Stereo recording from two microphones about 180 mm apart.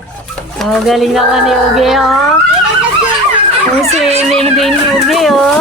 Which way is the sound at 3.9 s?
35° right (ahead or behind).